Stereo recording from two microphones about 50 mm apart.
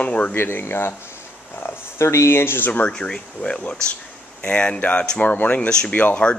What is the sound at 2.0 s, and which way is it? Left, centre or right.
Speech, left.